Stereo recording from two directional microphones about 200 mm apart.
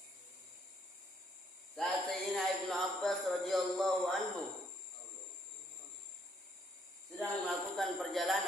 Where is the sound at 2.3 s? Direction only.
Centre (ahead or behind).